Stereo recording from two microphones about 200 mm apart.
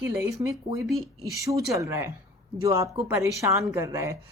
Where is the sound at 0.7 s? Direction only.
Centre (ahead or behind).